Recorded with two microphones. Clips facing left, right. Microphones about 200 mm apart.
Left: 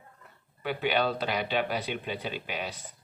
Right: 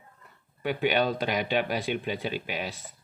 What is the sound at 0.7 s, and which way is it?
Speech, 10° right (ahead or behind).